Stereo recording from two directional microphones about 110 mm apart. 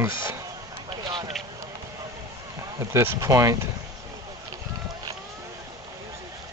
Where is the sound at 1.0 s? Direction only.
45° right (ahead or behind).